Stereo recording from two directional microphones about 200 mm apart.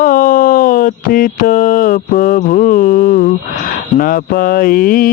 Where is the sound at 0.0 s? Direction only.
45° left (ahead or behind).